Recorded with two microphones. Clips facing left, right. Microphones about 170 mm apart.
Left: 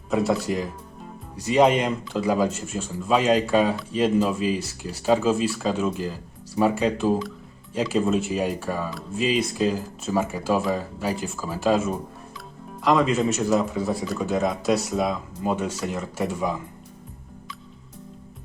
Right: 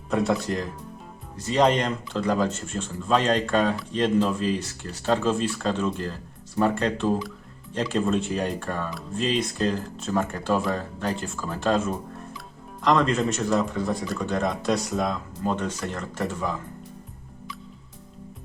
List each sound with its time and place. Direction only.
0.1 s speech: 5° left (ahead or behind)